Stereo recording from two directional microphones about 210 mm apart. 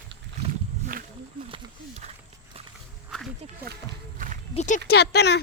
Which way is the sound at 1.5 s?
30° right (ahead or behind).